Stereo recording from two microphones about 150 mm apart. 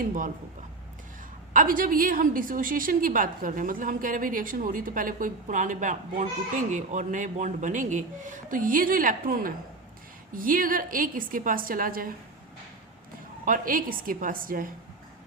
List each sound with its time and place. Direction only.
1.5 s a woman's voice: 65° right (ahead or behind)
13.4 s a woman's voice: 65° right (ahead or behind)